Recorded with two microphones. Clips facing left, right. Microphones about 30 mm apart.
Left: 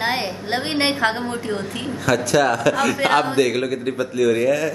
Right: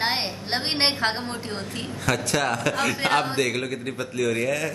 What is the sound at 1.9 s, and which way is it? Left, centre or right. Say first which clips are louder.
Speech: left 7 dB; centre.